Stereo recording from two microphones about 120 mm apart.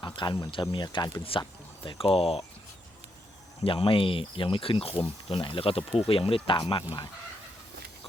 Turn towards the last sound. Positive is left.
turn(degrees=40)  # may be behind; listen again after turning